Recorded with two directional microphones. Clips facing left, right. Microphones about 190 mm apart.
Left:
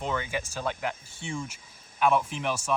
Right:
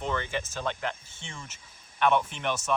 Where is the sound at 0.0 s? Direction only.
10° left (ahead or behind).